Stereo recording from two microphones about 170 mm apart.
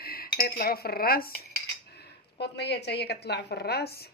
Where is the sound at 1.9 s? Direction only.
75° left (ahead or behind).